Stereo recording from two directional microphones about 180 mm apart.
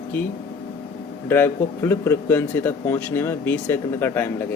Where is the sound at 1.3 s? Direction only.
10° left (ahead or behind).